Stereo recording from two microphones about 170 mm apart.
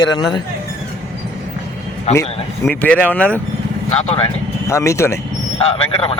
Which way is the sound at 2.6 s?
10° left (ahead or behind).